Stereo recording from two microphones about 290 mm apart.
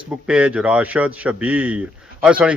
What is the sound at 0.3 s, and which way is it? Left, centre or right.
A man's voice, centre.